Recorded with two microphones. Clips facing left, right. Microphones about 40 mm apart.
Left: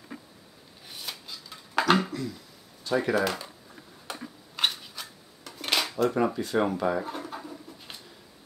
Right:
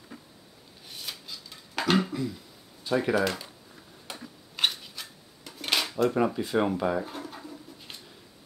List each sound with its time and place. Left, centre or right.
0.1 s a sound: left
0.8 s a sound: centre
2.9 s speech: centre
4.1 s tick-tock: centre
4.6 s cutlery: centre
7.0 s pigeon: centre